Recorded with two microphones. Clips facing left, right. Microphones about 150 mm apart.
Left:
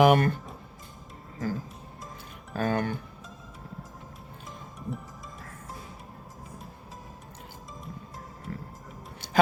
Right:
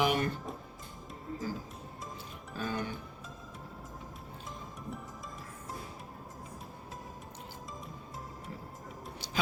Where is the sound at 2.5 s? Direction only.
55° left (ahead or behind).